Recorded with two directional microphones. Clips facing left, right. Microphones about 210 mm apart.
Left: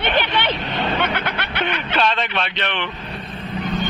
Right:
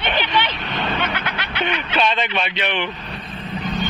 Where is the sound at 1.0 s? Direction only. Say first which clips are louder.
Left 2 dB; 55° left (ahead or behind).